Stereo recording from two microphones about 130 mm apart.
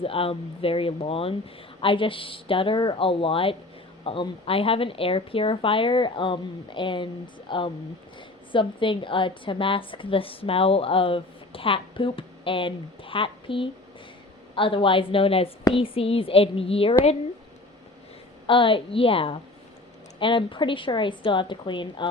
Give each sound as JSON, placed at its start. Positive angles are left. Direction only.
{"t": 0.0, "sound": "a woman's voice", "side_deg": 45}
{"t": 18.4, "sound": "a woman's voice", "side_deg": 40}